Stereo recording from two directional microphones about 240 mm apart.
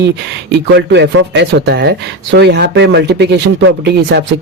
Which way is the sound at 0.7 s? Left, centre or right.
Right.